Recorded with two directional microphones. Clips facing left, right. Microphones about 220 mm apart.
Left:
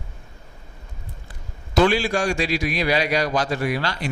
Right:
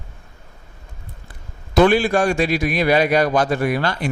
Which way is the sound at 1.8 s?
55° right (ahead or behind).